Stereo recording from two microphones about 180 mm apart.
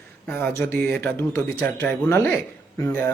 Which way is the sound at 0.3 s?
10° left (ahead or behind).